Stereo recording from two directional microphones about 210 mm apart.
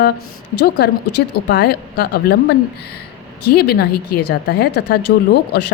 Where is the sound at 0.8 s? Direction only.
50° left (ahead or behind).